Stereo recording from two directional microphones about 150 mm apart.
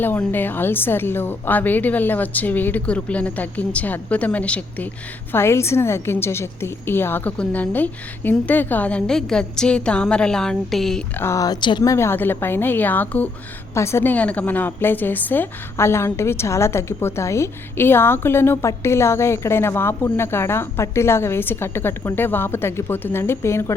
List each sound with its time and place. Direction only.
0.0 s a woman's voice: 15° left (ahead or behind)
11.2 s a woman's voice: 20° left (ahead or behind)